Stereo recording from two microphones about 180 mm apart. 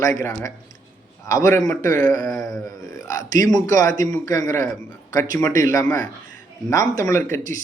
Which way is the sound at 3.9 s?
45° right (ahead or behind).